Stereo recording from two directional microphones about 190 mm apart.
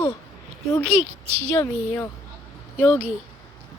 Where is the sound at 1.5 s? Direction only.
15° left (ahead or behind).